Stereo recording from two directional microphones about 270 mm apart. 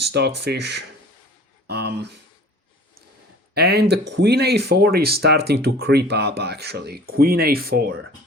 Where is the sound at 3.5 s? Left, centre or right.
Right.